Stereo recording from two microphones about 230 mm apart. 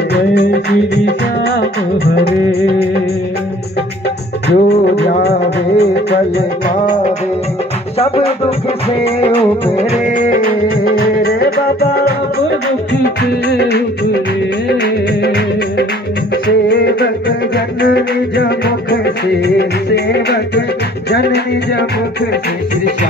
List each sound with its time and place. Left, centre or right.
0.1 s music: left
4.5 s music: left
9.0 s music: left
10.1 s music: left
13.2 s music: left
16.4 s music: left